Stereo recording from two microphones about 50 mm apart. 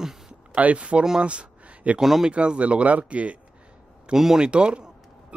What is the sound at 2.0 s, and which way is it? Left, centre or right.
Speech, centre.